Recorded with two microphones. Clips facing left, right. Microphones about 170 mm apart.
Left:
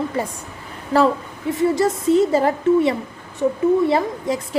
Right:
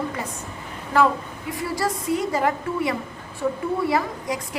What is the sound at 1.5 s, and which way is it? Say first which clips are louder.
A woman's voice: left 8 dB; 25° left (ahead or behind).